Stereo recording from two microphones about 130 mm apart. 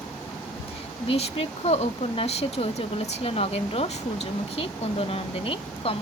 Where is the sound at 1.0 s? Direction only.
50° left (ahead or behind).